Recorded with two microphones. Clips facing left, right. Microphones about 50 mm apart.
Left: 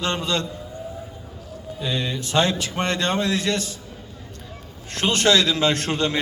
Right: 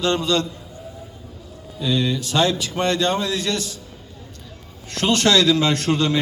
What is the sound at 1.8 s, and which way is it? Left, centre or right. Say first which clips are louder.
A man's voice: right 5 dB; left.